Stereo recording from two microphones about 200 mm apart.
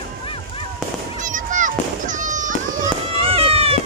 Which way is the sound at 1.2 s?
40° right (ahead or behind).